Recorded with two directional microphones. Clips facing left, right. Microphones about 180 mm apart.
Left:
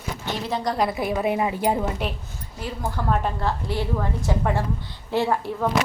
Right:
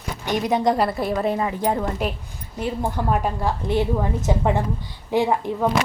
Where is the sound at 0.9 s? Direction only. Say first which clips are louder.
Right 1 dB; 5° left (ahead or behind).